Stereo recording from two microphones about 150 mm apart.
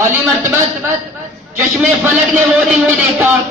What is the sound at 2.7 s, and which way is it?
Speech, centre (ahead or behind).